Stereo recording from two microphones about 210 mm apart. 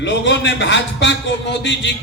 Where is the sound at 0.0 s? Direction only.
60° left (ahead or behind).